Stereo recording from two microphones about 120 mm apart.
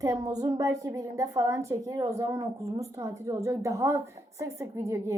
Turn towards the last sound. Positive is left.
turn(degrees=-25)  # may be behind; listen again after turning